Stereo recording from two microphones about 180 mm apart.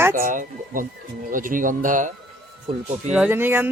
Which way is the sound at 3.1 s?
10° right (ahead or behind).